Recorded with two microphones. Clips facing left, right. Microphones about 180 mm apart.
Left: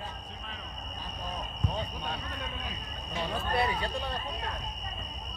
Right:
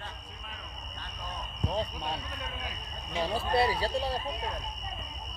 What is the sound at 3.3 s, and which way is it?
Speech, 30° right (ahead or behind).